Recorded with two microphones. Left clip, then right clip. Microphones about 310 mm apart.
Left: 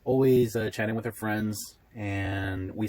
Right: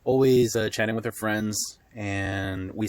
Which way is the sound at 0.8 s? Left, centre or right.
Right.